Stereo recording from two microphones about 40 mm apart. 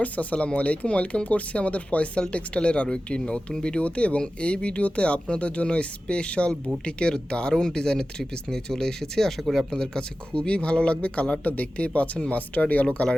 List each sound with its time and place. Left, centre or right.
0.0 s speech: left